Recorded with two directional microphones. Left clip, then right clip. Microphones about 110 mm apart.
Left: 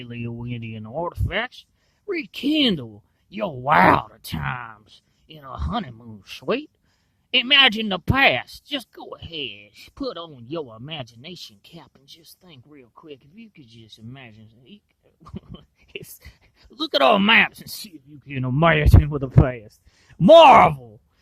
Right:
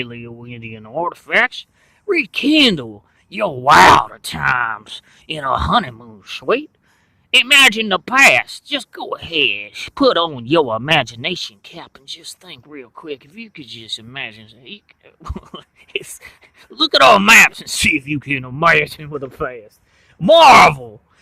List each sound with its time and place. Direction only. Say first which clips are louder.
0.1 s speech: right 1 dB; 55° left (ahead or behind); by 3.5 s 35° left (ahead or behind)
3.6 s speech: right 8 dB; 25° left (ahead or behind)
4.7 s speech: right 19 dB; 15° left (ahead or behind)
7.3 s speech: right 6 dB; 40° left (ahead or behind); by 10.0 s 20° left (ahead or behind)
10.1 s speech: right 18 dB; 10° left (ahead or behind)
11.7 s speech: right 13 dB; 35° left (ahead or behind)
15.9 s speech: right 12 dB; 35° left (ahead or behind)
18.3 s speech: right 5 dB; 55° left (ahead or behind)
20.2 s speech: right 1 dB; 90° left
20.5 s speech: right 5 dB; 30° left (ahead or behind)